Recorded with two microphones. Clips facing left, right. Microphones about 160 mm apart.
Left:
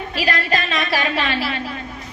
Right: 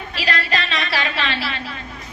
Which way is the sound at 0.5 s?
45° left (ahead or behind).